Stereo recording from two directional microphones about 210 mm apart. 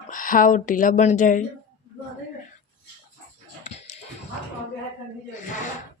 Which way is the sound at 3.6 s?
30° left (ahead or behind).